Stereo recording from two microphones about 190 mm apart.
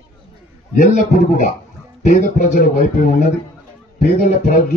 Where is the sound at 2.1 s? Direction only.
40° left (ahead or behind).